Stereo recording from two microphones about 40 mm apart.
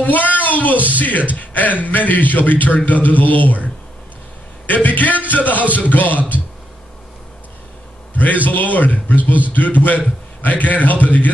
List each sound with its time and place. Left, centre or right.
0.0 s a man's voice: left
4.6 s a man's voice: left
8.1 s a sound: left
8.5 s a man's voice: left